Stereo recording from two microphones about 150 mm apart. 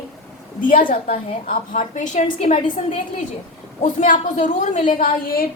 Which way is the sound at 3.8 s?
55° left (ahead or behind).